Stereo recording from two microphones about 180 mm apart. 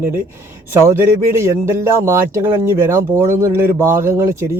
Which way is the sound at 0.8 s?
15° right (ahead or behind).